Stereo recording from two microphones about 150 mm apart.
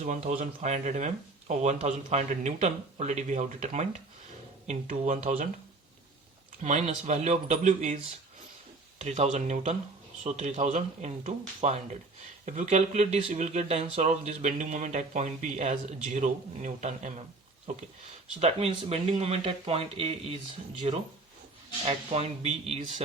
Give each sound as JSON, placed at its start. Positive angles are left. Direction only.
{"t": 0.0, "sound": "speech", "side_deg": -55}
{"t": 6.6, "sound": "speech", "side_deg": -50}
{"t": 9.0, "sound": "speech", "side_deg": -50}